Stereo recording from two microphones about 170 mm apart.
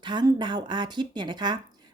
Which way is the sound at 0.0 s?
25° right (ahead or behind).